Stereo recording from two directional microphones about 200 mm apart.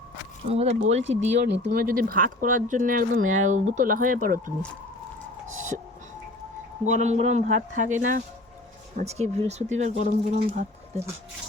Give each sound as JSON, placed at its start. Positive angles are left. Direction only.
{"t": 0.4, "sound": "speech", "side_deg": -30}
{"t": 1.6, "sound": "speech", "side_deg": -45}
{"t": 5.5, "sound": "a sound", "side_deg": -40}
{"t": 6.8, "sound": "speech", "side_deg": -35}